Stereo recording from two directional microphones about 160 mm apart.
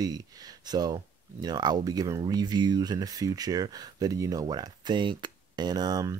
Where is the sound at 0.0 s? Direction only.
25° right (ahead or behind).